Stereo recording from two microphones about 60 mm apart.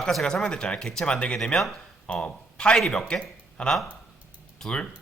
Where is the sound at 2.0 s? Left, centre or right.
Centre.